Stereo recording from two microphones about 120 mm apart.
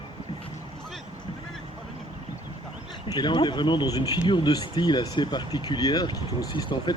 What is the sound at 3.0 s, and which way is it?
A man's voice, 40° left (ahead or behind).